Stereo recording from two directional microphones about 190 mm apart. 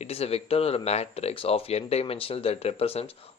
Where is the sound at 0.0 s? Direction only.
30° left (ahead or behind).